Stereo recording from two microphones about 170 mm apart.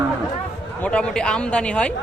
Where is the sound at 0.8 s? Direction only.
5° left (ahead or behind).